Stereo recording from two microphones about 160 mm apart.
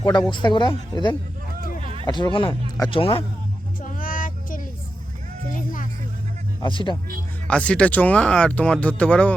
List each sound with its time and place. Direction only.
0.0 s speech: 25° left (ahead or behind)
1.8 s a sound: 35° right (ahead or behind)
2.0 s speech: 30° left (ahead or behind)
3.8 s child singing: 55° left (ahead or behind)
5.5 s music: 55° left (ahead or behind)
6.6 s speech: 30° left (ahead or behind)
7.4 s speech: 5° left (ahead or behind)